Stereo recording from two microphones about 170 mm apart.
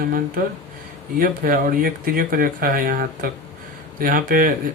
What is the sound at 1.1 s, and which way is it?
Speech, 55° right (ahead or behind).